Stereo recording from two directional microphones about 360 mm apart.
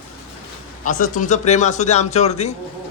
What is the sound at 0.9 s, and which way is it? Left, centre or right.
Speech, left.